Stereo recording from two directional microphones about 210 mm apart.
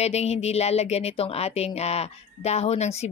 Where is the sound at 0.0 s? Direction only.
30° left (ahead or behind).